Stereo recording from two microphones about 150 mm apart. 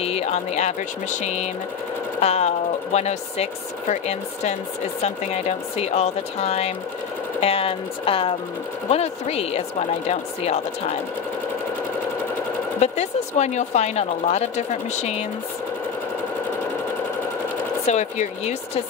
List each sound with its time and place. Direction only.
0.0 s a woman's voice: 45° left (ahead or behind)
12.8 s a woman's voice: 45° left (ahead or behind)
17.8 s a woman's voice: 50° left (ahead or behind)